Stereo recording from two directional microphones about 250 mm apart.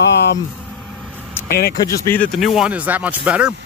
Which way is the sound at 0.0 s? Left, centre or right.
Left.